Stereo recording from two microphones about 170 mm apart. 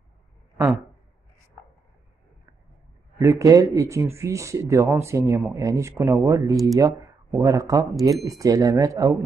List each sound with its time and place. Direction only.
3.2 s speech: 20° right (ahead or behind)